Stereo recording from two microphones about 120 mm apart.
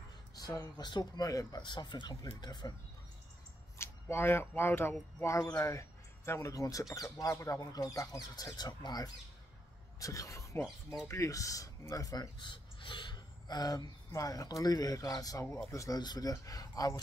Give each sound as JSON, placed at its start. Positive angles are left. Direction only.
{"t": 0.7, "sound": "speech", "side_deg": 35}
{"t": 3.7, "sound": "speech", "side_deg": 20}
{"t": 10.6, "sound": "speech", "side_deg": -5}
{"t": 11.1, "sound": "speech", "side_deg": 25}